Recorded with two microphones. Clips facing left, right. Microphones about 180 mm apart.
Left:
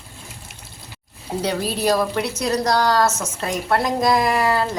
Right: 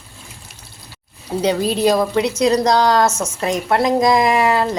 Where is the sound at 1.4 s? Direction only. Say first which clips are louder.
Right 6 dB; 20° right (ahead or behind).